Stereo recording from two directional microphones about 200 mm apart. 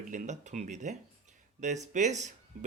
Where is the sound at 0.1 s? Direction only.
40° right (ahead or behind).